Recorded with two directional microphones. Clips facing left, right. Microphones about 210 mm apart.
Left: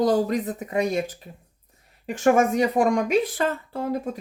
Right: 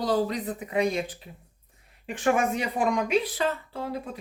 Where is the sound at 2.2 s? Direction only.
45° left (ahead or behind).